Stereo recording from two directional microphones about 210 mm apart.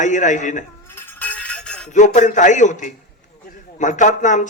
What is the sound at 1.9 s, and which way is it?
A man's voice, 35° left (ahead or behind).